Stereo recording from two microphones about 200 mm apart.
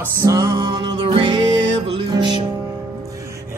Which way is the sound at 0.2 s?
15° right (ahead or behind).